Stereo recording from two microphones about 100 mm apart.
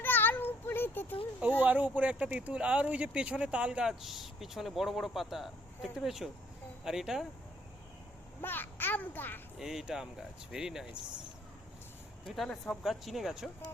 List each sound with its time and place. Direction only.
0.0 s a sound: 20° left (ahead or behind)
1.4 s speech: 15° right (ahead or behind)
8.4 s a child's voice: 20° left (ahead or behind)
9.6 s speech: 5° right (ahead or behind)
12.2 s speech: 5° left (ahead or behind)